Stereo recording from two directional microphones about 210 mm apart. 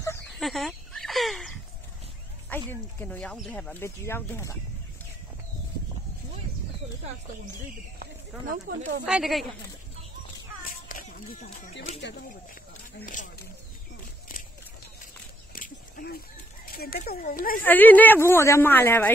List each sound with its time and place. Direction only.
0.4 s a sound: centre (ahead or behind)
2.5 s speech: 10° left (ahead or behind)
8.5 s speech: 50° right (ahead or behind)
9.0 s speech: centre (ahead or behind)
10.9 s speech: 40° left (ahead or behind)
13.0 s speech: 35° left (ahead or behind)
15.5 s a sound: 45° left (ahead or behind)
16.6 s speech: 45° left (ahead or behind)
17.6 s speech: 10° left (ahead or behind)